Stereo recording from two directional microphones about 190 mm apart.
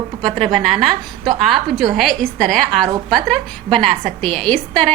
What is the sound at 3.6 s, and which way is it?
Speech, 30° right (ahead or behind).